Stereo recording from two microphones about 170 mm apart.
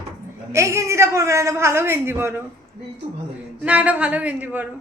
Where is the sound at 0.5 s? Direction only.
15° right (ahead or behind).